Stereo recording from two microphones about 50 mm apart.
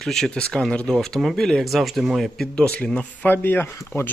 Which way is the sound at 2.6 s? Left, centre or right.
Centre.